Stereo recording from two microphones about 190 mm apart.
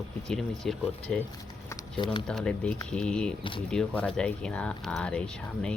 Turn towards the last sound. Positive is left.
turn(degrees=5)  # may be behind; listen again after turning